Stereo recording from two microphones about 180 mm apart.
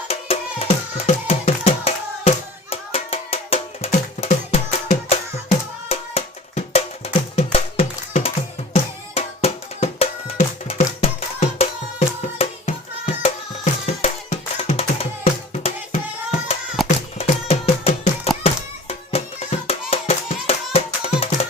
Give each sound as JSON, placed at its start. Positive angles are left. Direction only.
{"t": 0.1, "sound": "music", "side_deg": 35}
{"t": 13.8, "sound": "music", "side_deg": 40}
{"t": 16.8, "sound": "a sound", "side_deg": 0}
{"t": 17.2, "sound": "music", "side_deg": 35}